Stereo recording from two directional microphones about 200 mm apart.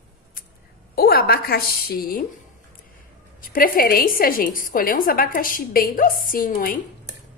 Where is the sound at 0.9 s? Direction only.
50° left (ahead or behind).